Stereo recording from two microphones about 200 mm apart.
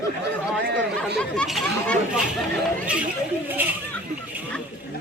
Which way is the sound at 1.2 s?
Centre (ahead or behind).